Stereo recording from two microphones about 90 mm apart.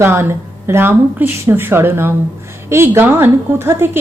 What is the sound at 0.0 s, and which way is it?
A woman's voice, 30° right (ahead or behind).